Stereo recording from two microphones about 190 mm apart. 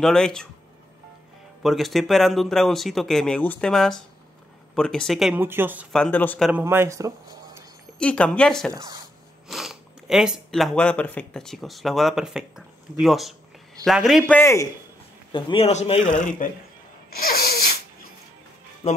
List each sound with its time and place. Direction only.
0.0 s speech: centre (ahead or behind)
1.6 s speech: centre (ahead or behind)
5.9 s a man's voice: 5° left (ahead or behind)
6.5 s speech: 10° right (ahead or behind)
8.0 s a man's voice: 5° left (ahead or behind)
15.3 s a man's voice: 30° left (ahead or behind); by 16.6 s 45° left (ahead or behind)
17.3 s sneeze: 55° left (ahead or behind)
18.8 s speech: 35° left (ahead or behind)